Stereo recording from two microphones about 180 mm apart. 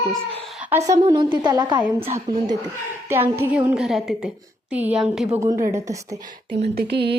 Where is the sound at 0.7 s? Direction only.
15° right (ahead or behind).